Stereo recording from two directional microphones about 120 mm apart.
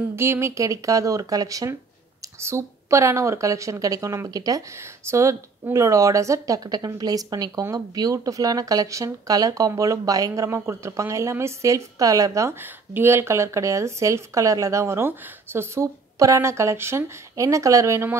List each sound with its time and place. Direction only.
0.1 s a woman's voice: 20° right (ahead or behind)